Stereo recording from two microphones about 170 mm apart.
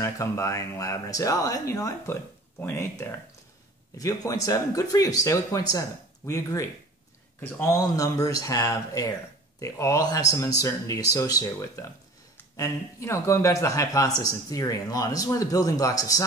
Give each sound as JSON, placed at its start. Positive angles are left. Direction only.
{"t": 0.0, "sound": "speech", "side_deg": 20}